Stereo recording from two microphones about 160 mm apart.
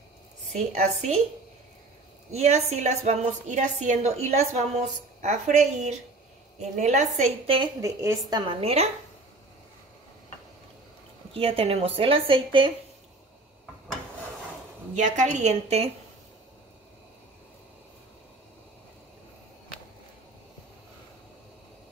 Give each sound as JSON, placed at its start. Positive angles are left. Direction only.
{"t": 0.5, "sound": "a woman's voice", "side_deg": -45}
{"t": 2.3, "sound": "a woman's voice", "side_deg": -45}
{"t": 7.8, "sound": "a woman's voice", "side_deg": -20}
{"t": 11.3, "sound": "speech", "side_deg": -35}
{"t": 15.0, "sound": "a woman's voice", "side_deg": -50}